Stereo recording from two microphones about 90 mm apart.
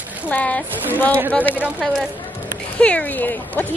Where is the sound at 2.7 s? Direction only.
15° left (ahead or behind).